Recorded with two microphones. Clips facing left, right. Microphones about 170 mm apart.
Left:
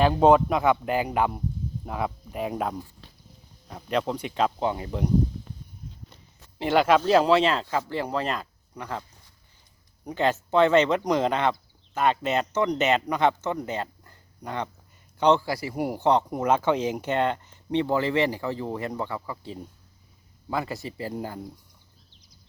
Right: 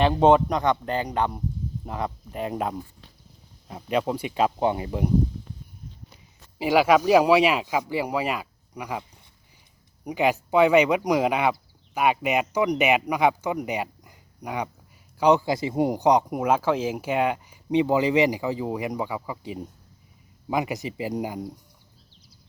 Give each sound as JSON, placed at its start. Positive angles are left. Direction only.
{"t": 0.0, "sound": "a man's voice", "side_deg": 0}
{"t": 3.8, "sound": "speech", "side_deg": -10}
{"t": 6.6, "sound": "speech", "side_deg": -5}